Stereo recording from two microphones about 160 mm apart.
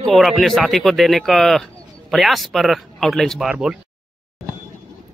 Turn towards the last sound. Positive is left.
turn(degrees=-5)  # may be behind; listen again after turning